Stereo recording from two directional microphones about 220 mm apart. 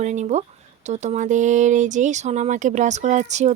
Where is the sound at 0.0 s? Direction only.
30° right (ahead or behind).